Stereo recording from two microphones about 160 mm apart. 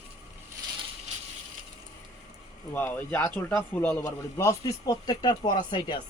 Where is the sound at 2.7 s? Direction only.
10° left (ahead or behind); by 6.0 s 30° left (ahead or behind).